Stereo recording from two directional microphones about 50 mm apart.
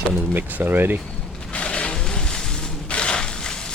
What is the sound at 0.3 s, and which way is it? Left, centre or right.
Speech, right.